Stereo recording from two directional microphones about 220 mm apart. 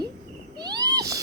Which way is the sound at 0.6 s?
20° right (ahead or behind).